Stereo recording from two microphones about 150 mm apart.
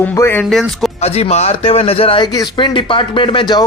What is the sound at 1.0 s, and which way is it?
A man's voice, 45° left (ahead or behind).